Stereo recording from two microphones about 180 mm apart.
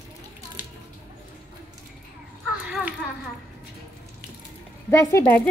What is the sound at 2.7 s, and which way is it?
Children playing, 5° right (ahead or behind).